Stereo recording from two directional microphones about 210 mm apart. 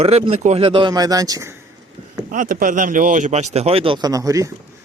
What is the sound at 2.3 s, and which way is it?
Speech, 40° right (ahead or behind).